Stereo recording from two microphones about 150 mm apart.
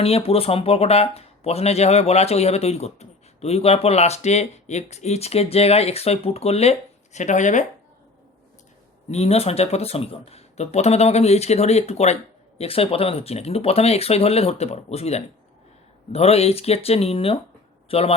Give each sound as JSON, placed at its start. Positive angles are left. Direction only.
{"t": 0.0, "sound": "speech", "side_deg": 40}
{"t": 9.0, "sound": "speech", "side_deg": 45}